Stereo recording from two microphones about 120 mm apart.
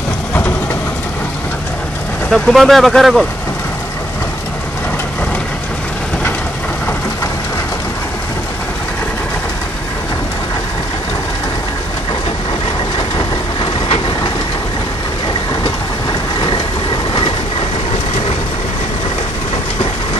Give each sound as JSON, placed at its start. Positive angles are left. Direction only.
{"t": 2.3, "sound": "speech", "side_deg": 0}
{"t": 13.6, "sound": "vehicle", "side_deg": 50}
{"t": 15.6, "sound": "train", "side_deg": 40}